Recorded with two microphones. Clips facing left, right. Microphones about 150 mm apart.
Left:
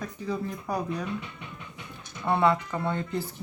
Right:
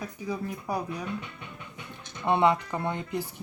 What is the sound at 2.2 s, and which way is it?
Speech, 20° right (ahead or behind).